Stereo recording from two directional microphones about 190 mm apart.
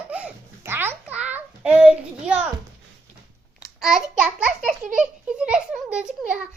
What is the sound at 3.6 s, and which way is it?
A child's voice, 5° right (ahead or behind).